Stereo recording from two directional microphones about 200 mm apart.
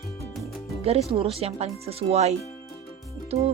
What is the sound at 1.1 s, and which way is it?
Speech, 30° right (ahead or behind).